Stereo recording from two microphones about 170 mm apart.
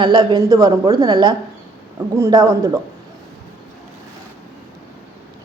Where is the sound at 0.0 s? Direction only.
25° right (ahead or behind).